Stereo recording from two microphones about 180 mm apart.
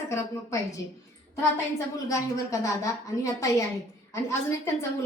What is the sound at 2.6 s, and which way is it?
A woman's voice, 15° left (ahead or behind).